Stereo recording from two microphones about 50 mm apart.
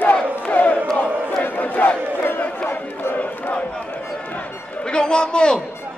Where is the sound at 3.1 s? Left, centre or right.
Left.